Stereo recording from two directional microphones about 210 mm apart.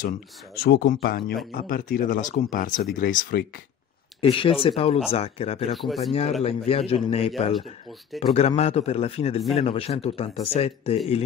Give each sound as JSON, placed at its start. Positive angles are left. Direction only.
{"t": 0.6, "sound": "speech", "side_deg": 45}
{"t": 4.2, "sound": "speech", "side_deg": 25}
{"t": 5.8, "sound": "speech", "side_deg": 0}
{"t": 6.4, "sound": "speech", "side_deg": 30}